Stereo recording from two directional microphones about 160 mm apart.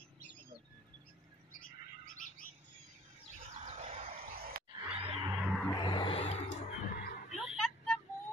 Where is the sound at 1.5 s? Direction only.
60° left (ahead or behind).